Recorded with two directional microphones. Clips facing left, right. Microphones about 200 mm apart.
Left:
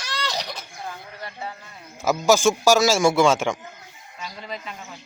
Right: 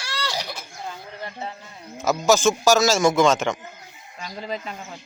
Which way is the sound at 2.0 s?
10° left (ahead or behind).